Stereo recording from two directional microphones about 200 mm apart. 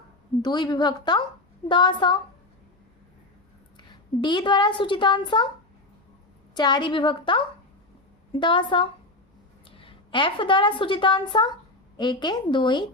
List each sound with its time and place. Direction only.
0.4 s a woman's voice: 20° left (ahead or behind)
3.8 s a woman's voice: 20° left (ahead or behind)
6.5 s a woman's voice: 20° left (ahead or behind)